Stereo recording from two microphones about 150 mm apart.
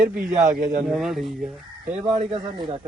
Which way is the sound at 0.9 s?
5° right (ahead or behind).